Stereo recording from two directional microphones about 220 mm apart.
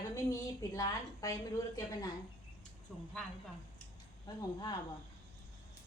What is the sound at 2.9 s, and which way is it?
Speech, 5° left (ahead or behind).